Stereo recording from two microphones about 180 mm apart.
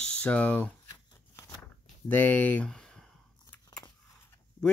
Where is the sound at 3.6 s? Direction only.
25° left (ahead or behind).